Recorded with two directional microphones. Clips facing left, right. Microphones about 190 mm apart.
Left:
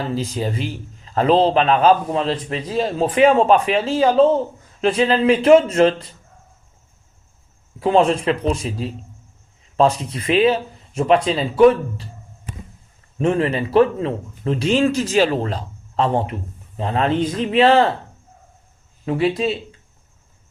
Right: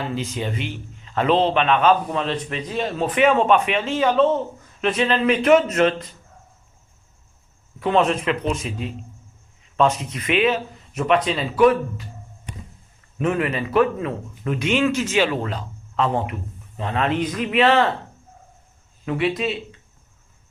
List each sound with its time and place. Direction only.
0.0 s speech: 35° left (ahead or behind)
7.8 s speech: 30° left (ahead or behind)
13.1 s speech: 30° left (ahead or behind)
19.0 s speech: 30° left (ahead or behind)